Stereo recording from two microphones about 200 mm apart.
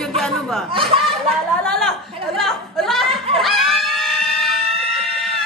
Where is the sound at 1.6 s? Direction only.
5° left (ahead or behind).